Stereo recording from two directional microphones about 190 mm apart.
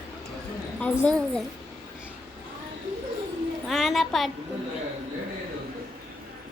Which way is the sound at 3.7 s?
Centre (ahead or behind).